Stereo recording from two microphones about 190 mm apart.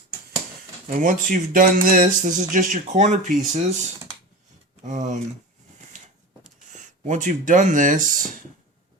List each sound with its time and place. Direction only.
0.9 s speech: 45° right (ahead or behind)
4.9 s speech: 40° right (ahead or behind)
6.7 s speech: 40° right (ahead or behind)